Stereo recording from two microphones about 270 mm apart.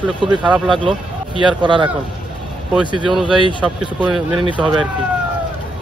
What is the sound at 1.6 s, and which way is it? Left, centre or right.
Speech, centre.